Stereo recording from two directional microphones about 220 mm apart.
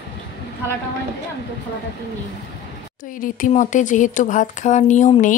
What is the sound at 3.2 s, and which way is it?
Speech, 35° left (ahead or behind).